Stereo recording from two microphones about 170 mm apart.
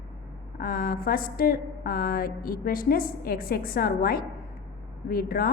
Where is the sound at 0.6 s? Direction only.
55° left (ahead or behind).